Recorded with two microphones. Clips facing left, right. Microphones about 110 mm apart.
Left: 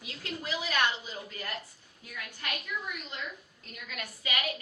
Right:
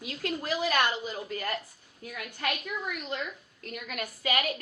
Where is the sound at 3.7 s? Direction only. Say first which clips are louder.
Right 6 dB; 50° right (ahead or behind).